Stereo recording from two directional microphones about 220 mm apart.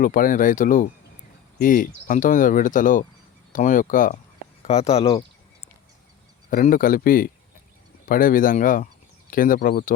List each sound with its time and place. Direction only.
0.0 s speech: 40° left (ahead or behind)
6.5 s speech: 40° left (ahead or behind)